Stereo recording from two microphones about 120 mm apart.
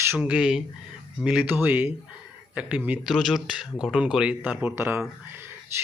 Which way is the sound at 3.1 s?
Centre (ahead or behind).